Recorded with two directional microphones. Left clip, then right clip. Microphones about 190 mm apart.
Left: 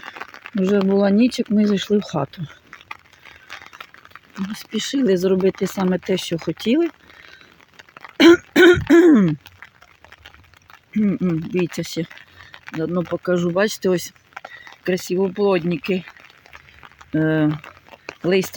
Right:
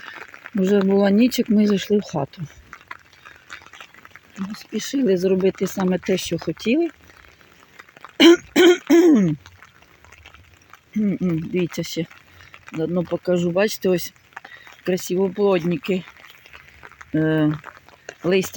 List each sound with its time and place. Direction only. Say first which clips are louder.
0.5 s speech: even; centre (ahead or behind)
4.6 s speech: left 1 dB; 15° left (ahead or behind)
7.9 s throat clearing: left 1 dB; 5° left (ahead or behind)
11.1 s speech: left 1 dB; 10° left (ahead or behind)
14.4 s a sound: left 3 dB; 25° left (ahead or behind)
14.8 s speech: left 1 dB; centre (ahead or behind)
17.1 s speech: left 1 dB; 5° left (ahead or behind)